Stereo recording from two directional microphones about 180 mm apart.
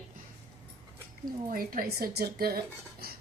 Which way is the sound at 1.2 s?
50° right (ahead or behind).